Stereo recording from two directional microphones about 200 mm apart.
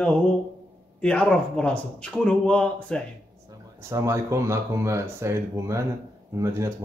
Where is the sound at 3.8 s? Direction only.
15° right (ahead or behind).